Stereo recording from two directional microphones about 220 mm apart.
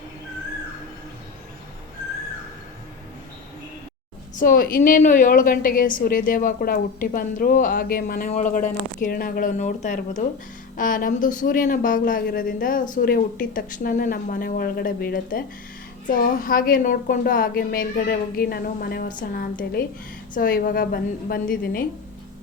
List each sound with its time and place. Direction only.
4.4 s a woman's voice: 40° left (ahead or behind)